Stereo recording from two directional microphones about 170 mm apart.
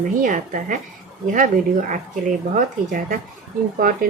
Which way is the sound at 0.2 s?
50° right (ahead or behind).